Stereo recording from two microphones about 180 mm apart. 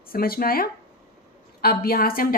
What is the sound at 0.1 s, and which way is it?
A woman's voice, 55° left (ahead or behind).